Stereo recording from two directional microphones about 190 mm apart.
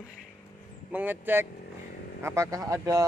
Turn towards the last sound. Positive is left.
turn(degrees=-15)  # may be behind; listen again after turning